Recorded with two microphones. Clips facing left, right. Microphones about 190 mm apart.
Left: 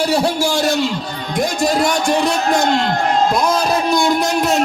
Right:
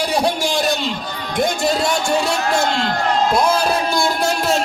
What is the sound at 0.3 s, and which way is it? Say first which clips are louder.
A man's voice: left 3 dB; 20° right (ahead or behind).